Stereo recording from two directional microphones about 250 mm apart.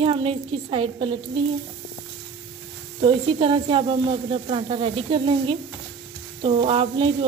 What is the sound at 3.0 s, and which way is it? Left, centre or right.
Speech, centre.